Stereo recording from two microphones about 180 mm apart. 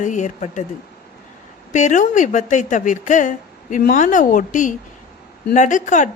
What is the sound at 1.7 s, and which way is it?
A woman's voice, 40° left (ahead or behind).